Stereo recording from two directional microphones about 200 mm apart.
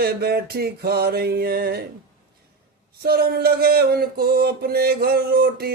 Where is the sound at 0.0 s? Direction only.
50° right (ahead or behind).